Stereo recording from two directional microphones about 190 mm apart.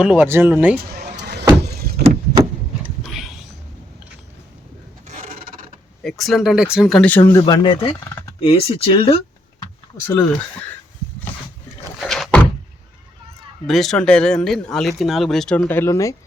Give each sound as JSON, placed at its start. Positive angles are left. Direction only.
{"t": 0.0, "sound": "speech", "side_deg": -5}
{"t": 0.9, "sound": "vehicle", "side_deg": -60}
{"t": 2.0, "sound": "vehicle", "side_deg": -20}
{"t": 3.0, "sound": "a sound", "side_deg": 0}
{"t": 5.0, "sound": "filing", "side_deg": -45}
{"t": 6.0, "sound": "speech", "side_deg": 0}
{"t": 11.9, "sound": "thunk", "side_deg": 0}
{"t": 13.7, "sound": "speech", "side_deg": 0}